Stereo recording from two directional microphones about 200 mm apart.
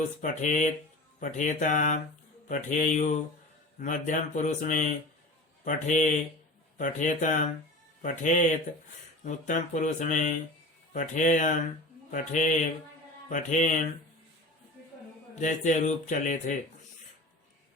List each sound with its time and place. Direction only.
0.2 s speech: 40° left (ahead or behind)
15.4 s speech: 35° left (ahead or behind)